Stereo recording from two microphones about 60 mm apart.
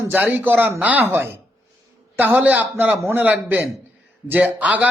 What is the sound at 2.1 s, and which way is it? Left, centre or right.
Speech, right.